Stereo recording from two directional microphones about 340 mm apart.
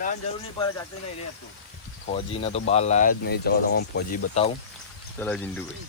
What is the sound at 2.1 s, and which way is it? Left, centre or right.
Speech, centre.